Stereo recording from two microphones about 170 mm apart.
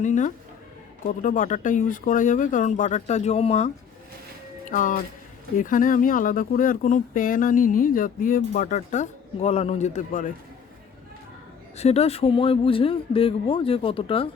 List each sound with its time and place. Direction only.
0.0 s speech: 45° left (ahead or behind)
4.6 s speech: 50° left (ahead or behind)
11.8 s speech: 40° left (ahead or behind)